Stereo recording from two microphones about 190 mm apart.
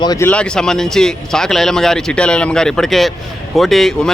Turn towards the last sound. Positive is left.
turn(degrees=0)  # may be behind; listen again after turning